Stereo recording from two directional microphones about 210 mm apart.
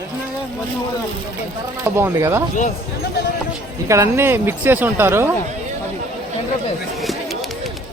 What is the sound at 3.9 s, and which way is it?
Speech, 10° right (ahead or behind).